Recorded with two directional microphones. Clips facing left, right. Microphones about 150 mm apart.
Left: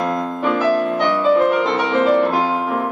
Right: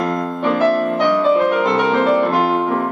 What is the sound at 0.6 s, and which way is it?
Music, 55° right (ahead or behind).